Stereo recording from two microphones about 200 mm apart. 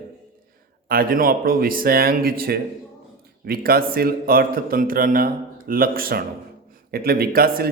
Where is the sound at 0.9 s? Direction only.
45° right (ahead or behind).